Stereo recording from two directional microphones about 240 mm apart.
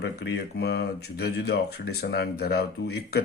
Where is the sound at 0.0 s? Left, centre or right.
Left.